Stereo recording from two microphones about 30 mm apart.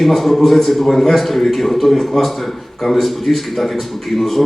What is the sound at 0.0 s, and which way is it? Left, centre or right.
A man's voice, centre.